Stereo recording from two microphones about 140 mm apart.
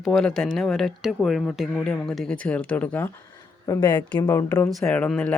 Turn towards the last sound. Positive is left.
turn(degrees=10)  # may be behind; listen again after turning